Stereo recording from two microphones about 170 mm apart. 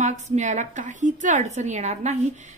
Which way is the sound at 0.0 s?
45° right (ahead or behind).